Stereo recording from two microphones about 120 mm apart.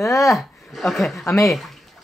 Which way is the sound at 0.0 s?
25° left (ahead or behind).